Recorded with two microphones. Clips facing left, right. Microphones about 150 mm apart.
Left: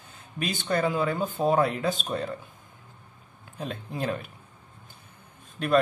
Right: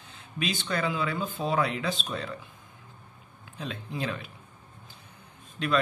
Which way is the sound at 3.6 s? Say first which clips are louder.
Left 2 dB; 50° left (ahead or behind).